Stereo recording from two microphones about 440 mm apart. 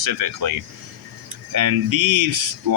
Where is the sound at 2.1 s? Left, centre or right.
Right.